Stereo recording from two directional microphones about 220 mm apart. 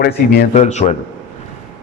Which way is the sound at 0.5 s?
30° left (ahead or behind).